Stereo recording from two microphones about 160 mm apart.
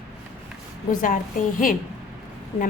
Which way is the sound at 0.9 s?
60° left (ahead or behind).